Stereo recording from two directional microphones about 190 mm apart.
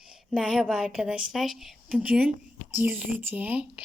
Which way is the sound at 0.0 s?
5° right (ahead or behind).